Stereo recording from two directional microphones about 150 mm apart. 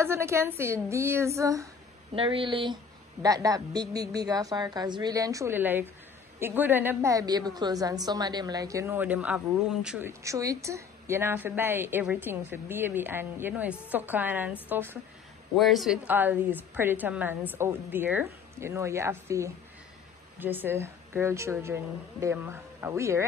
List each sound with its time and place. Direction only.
0.0 s a woman's voice: 15° right (ahead or behind)
2.1 s a woman's voice: 35° right (ahead or behind); by 10.0 s 5° right (ahead or behind)
10.0 s a woman's voice: 20° right (ahead or behind)
15.5 s speech: centre (ahead or behind)
16.1 s a woman's voice: 10° right (ahead or behind)